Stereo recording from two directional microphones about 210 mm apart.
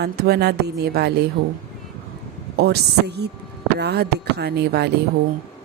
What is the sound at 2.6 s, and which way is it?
Music, 50° right (ahead or behind).